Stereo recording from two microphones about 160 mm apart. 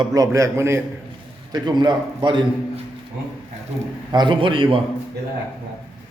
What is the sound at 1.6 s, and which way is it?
A man's voice, 30° right (ahead or behind).